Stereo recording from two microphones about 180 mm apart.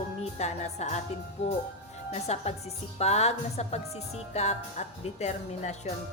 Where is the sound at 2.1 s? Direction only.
40° left (ahead or behind).